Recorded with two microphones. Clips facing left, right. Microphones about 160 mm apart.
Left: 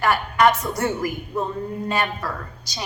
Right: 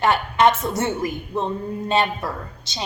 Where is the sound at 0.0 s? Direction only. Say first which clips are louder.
Right 1 dB; 25° right (ahead or behind).